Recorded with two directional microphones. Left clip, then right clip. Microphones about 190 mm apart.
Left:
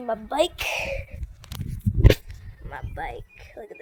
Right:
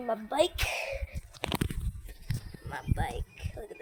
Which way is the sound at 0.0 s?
40° left (ahead or behind).